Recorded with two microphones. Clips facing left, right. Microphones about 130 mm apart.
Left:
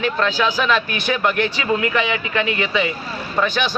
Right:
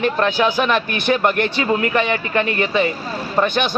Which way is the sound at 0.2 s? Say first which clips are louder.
Right 2 dB; 20° right (ahead or behind).